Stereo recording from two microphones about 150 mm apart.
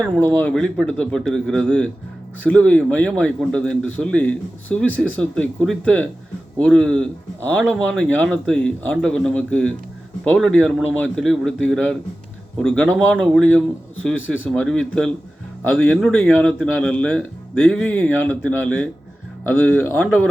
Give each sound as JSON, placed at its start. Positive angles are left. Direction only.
{"t": 0.3, "sound": "a man's voice", "side_deg": 10}
{"t": 16.0, "sound": "a man's voice", "side_deg": 0}